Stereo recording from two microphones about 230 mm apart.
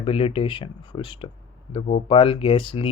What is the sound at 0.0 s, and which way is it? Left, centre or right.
Speech, left.